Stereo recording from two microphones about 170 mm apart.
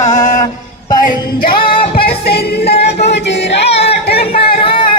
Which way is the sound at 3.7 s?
35° left (ahead or behind).